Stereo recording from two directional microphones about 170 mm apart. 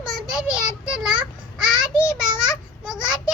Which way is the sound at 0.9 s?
5° right (ahead or behind).